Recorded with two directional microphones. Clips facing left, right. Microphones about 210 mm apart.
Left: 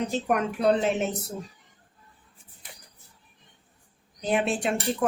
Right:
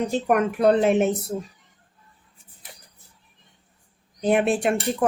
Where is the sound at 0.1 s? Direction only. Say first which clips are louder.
Right 5 dB; 55° right (ahead or behind).